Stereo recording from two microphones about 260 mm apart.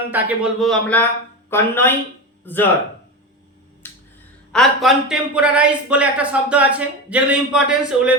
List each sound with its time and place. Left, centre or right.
0.1 s speech: centre
3.8 s finger snapping: centre
4.5 s speech: centre